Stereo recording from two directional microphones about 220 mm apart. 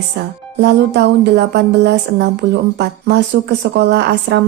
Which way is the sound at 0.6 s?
50° right (ahead or behind).